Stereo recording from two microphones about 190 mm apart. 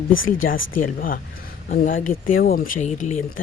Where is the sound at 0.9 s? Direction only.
45° left (ahead or behind).